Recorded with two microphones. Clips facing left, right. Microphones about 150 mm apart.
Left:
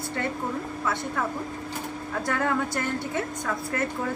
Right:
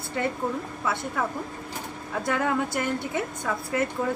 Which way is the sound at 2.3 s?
15° right (ahead or behind).